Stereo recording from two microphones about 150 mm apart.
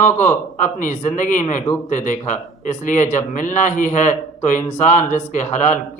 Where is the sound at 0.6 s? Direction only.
60° left (ahead or behind).